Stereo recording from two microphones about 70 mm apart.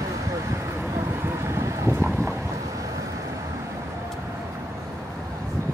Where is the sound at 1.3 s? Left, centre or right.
Right.